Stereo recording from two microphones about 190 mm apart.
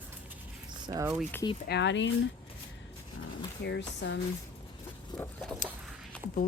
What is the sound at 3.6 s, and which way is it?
Speech, 65° left (ahead or behind).